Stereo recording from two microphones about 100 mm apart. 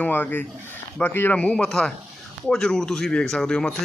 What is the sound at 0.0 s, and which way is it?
A man's voice, 20° left (ahead or behind).